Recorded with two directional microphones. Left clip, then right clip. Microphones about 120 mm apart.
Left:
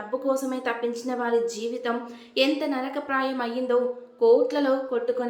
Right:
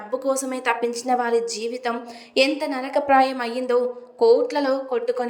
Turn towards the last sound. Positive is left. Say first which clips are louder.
# right 2 dB
turn(degrees=-60)  # may be behind; listen again after turning